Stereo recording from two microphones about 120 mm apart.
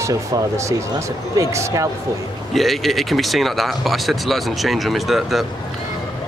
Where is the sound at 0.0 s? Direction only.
25° right (ahead or behind).